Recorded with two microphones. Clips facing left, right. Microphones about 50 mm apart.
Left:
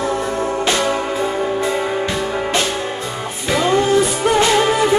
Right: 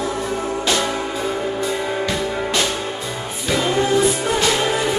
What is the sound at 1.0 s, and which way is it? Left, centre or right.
Music, centre.